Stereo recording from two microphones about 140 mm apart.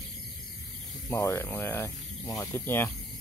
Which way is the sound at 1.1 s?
15° left (ahead or behind).